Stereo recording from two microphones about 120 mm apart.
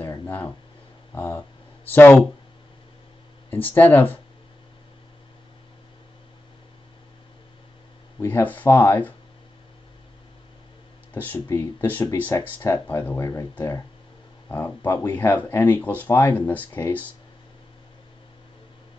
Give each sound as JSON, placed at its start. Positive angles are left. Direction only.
{"t": 0.1, "sound": "a sound", "side_deg": 20}
{"t": 1.1, "sound": "speech", "side_deg": 15}
{"t": 3.4, "sound": "speech", "side_deg": 15}
{"t": 8.2, "sound": "speech", "side_deg": 20}
{"t": 11.1, "sound": "speech", "side_deg": 15}